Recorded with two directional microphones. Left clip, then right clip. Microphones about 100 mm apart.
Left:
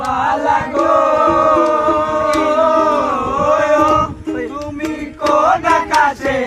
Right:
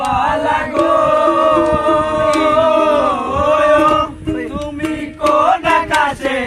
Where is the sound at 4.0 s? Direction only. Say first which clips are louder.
Even; 20° left (ahead or behind).